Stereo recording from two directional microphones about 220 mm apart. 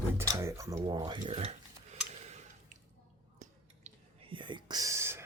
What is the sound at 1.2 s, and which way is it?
Tick-tock, 30° right (ahead or behind).